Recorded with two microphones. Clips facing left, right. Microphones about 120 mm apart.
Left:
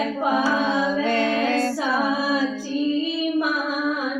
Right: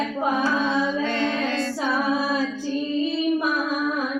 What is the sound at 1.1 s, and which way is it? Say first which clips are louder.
Music: left 3 dB; 45° left (ahead or behind).